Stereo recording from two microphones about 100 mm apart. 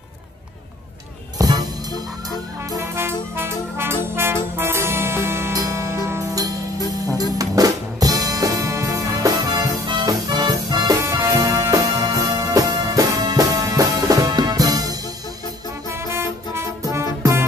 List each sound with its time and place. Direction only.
1.4 s music: 40° right (ahead or behind)
2.8 s brass instrument: 25° right (ahead or behind)
7.3 s music: 40° right (ahead or behind)
11.0 s music: 30° right (ahead or behind)
15.9 s music: 25° right (ahead or behind)